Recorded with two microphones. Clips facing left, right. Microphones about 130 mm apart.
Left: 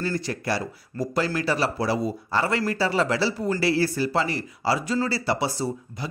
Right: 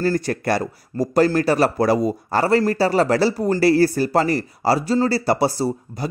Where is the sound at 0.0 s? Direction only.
45° right (ahead or behind).